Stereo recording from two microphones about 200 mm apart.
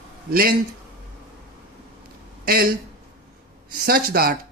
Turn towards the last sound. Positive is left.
turn(degrees=-45)  # may be behind; listen again after turning